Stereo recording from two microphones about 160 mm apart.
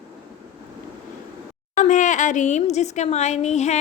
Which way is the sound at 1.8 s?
50° left (ahead or behind).